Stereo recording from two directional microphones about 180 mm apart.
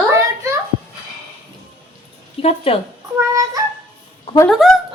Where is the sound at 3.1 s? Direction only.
20° right (ahead or behind).